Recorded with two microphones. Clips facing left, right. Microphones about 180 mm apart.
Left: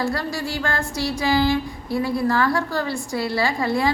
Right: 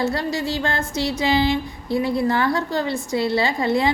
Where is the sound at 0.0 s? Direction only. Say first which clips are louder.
Right 2 dB; 20° right (ahead or behind).